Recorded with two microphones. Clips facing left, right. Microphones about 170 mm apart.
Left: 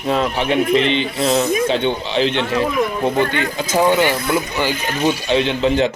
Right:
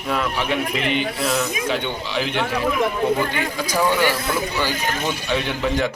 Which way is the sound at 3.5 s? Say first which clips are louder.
Left 5 dB; 25° left (ahead or behind).